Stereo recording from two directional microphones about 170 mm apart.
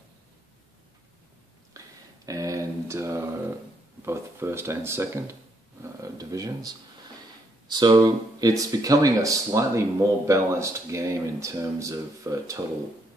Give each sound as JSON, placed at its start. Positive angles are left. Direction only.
{"t": 2.2, "sound": "speech", "side_deg": -20}
{"t": 6.0, "sound": "a sound", "side_deg": -20}
{"t": 7.6, "sound": "speech", "side_deg": -25}